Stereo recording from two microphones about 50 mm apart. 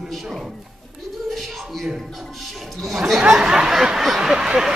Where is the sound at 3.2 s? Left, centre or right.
Centre.